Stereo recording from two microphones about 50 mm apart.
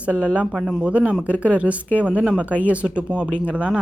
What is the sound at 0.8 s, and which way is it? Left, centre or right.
Speech, right.